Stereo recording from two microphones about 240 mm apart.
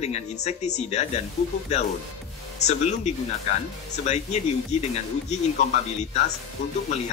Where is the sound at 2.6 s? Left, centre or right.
Left.